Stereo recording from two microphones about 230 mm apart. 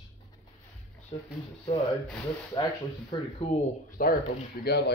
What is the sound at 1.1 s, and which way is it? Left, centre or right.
Speech, left.